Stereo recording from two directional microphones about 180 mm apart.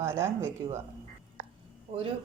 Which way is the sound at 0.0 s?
15° right (ahead or behind).